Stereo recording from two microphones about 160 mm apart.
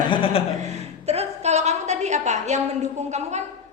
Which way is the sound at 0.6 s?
45° right (ahead or behind).